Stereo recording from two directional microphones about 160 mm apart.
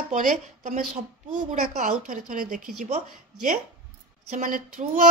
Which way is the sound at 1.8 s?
50° right (ahead or behind).